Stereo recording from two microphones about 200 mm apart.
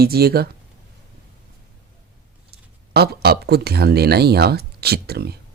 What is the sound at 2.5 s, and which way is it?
Speech, 50° right (ahead or behind).